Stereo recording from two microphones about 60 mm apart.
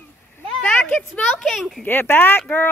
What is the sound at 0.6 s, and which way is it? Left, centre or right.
Speech, left.